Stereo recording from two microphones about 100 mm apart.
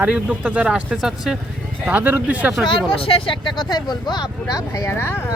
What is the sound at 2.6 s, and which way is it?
Speech, 65° left (ahead or behind).